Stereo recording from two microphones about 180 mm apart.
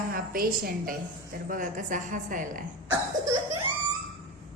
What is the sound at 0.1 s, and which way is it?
A woman's voice, 55° right (ahead or behind).